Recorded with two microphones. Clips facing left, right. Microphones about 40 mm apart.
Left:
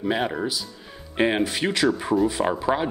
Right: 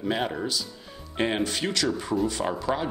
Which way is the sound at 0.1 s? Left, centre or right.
Centre.